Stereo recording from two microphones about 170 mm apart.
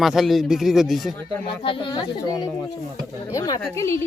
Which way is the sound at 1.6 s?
30° left (ahead or behind).